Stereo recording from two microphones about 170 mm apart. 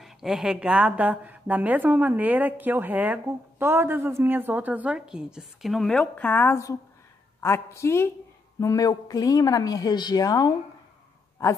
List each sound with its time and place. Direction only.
0.0 s a woman's voice: 5° right (ahead or behind); by 10.5 s 20° left (ahead or behind)